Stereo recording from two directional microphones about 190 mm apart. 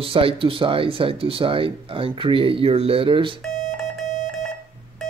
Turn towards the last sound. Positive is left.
turn(degrees=-25)  # may be behind; listen again after turning